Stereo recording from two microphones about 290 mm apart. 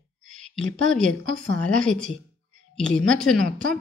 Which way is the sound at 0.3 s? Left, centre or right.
Centre.